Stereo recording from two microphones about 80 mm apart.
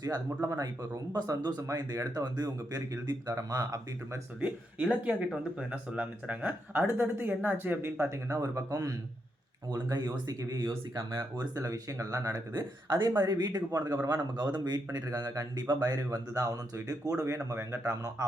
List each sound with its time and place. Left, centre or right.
0.0 s speech: right
1.6 s speech: right
2.7 s speech: right
4.8 s speech: centre; by 8.2 s right
8.3 s speech: right
9.6 s speech: right
10.9 s speech: right
14.5 s speech: right